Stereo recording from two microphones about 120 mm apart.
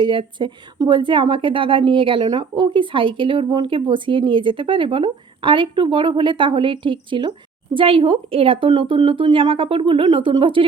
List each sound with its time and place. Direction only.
0.0 s a woman's voice: 45° right (ahead or behind)